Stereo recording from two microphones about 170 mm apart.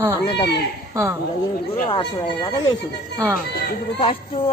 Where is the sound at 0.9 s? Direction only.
20° right (ahead or behind).